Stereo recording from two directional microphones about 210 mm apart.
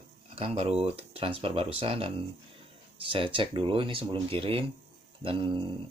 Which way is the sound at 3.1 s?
25° right (ahead or behind).